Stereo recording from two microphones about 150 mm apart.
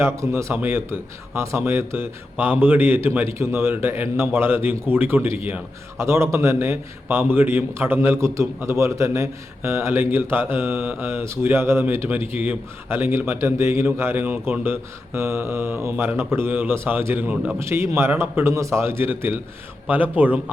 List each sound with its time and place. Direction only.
0.0 s a man's voice: 20° right (ahead or behind)